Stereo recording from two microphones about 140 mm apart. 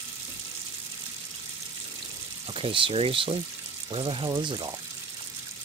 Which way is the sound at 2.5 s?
35° right (ahead or behind).